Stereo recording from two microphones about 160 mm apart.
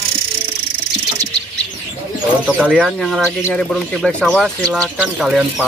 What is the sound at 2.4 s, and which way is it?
Speech, 5° right (ahead or behind).